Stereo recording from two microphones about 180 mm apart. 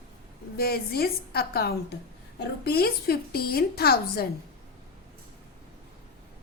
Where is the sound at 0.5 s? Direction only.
60° left (ahead or behind).